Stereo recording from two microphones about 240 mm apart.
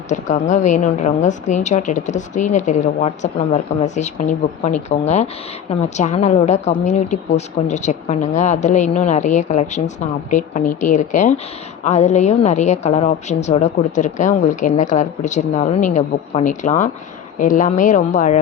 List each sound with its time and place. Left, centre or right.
0.1 s a woman's voice: left